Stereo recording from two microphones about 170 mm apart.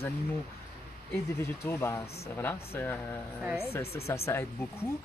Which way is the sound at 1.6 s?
15° left (ahead or behind).